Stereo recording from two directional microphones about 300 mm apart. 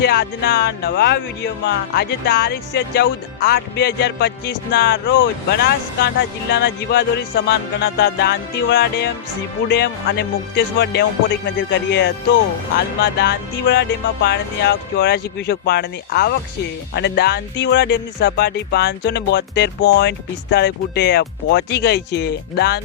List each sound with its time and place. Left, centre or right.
0.0 s speech: left